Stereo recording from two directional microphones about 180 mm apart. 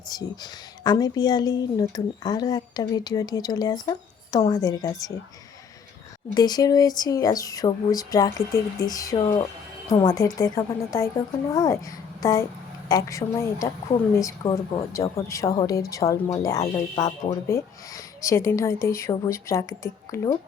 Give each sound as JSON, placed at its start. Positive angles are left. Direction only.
{"t": 0.1, "sound": "speech", "side_deg": 20}
{"t": 6.3, "sound": "a woman's voice", "side_deg": 20}